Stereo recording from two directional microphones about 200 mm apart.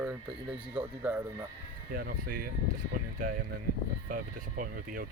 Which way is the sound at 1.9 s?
45° right (ahead or behind).